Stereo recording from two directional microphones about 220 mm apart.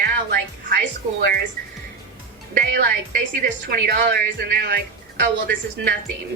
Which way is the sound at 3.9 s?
45° right (ahead or behind).